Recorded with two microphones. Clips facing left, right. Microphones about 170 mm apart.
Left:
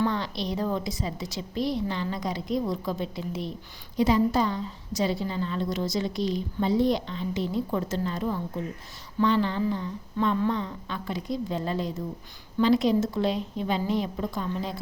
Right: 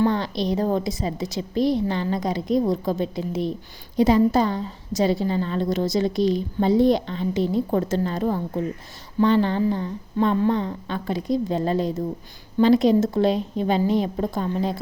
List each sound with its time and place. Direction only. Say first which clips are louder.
0.0 s a woman's voice: right 6 dB; 50° right (ahead or behind)